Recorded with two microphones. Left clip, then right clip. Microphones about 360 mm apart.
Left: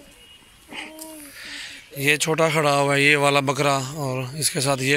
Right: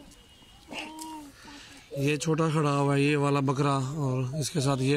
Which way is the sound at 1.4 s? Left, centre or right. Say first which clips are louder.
Left 10 dB; centre.